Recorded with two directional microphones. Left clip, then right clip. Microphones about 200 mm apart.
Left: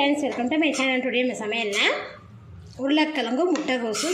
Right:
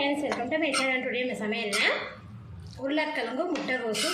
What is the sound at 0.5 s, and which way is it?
A woman's voice, 40° left (ahead or behind).